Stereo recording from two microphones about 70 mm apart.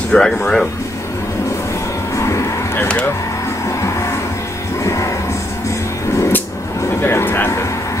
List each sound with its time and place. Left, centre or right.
0.1 s speech: centre
2.1 s vehicle: left
4.8 s music: left
7.0 s speech: left